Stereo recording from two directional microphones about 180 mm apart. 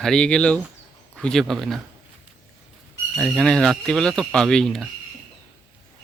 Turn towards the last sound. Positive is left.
turn(degrees=5)  # may be behind; listen again after turning